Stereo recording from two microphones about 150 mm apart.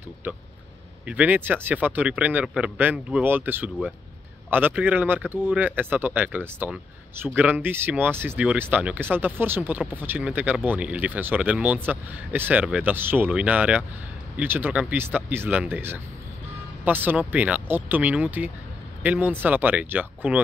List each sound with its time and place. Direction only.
1.0 s speech: 10° right (ahead or behind)